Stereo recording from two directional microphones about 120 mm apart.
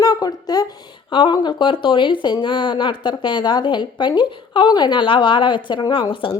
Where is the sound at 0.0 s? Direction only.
35° left (ahead or behind).